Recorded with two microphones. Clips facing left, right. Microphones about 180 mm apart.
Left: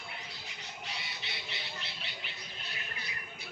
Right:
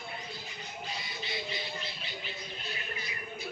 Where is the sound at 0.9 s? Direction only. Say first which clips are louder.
Right 7 dB; 70° left (ahead or behind).